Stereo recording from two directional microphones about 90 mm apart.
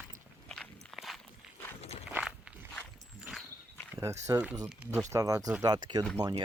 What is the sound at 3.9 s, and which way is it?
Speech, 30° right (ahead or behind).